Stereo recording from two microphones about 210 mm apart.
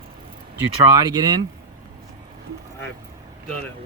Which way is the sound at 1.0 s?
20° right (ahead or behind).